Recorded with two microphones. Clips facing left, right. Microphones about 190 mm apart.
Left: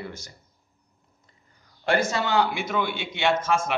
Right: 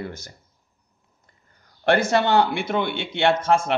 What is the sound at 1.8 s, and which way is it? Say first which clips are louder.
A man's voice: right 5 dB; 65° right (ahead or behind).